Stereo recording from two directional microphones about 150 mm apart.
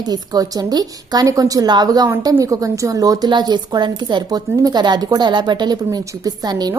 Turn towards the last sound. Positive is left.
turn(degrees=-25)  # may be behind; listen again after turning